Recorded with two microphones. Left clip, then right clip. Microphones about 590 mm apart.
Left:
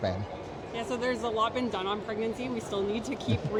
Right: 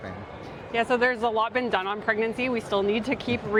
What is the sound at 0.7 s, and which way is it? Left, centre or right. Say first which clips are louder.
Speech: right 9 dB; right.